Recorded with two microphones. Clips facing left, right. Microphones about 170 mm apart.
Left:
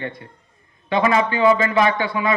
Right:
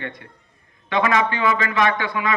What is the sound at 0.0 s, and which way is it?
A man's voice, 30° left (ahead or behind).